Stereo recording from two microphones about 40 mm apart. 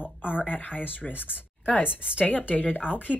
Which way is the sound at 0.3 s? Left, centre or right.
Left.